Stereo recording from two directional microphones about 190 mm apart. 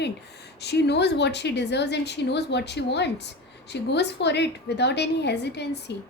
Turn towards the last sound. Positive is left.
turn(degrees=60)  # may be behind; listen again after turning